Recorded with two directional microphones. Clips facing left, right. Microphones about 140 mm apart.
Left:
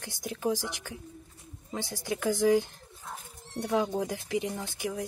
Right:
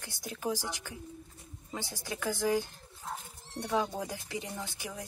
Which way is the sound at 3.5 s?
15° left (ahead or behind).